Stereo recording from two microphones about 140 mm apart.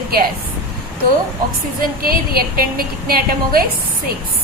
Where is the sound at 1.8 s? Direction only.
90° right.